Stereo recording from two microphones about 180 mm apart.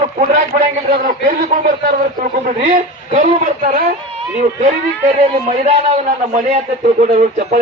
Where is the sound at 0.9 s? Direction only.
50° right (ahead or behind).